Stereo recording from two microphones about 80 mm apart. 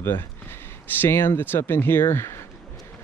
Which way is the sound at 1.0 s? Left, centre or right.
Left.